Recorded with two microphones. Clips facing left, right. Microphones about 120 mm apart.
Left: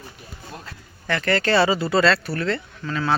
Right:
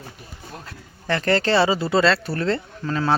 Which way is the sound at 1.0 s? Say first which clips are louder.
Right 2 dB; 30° right (ahead or behind).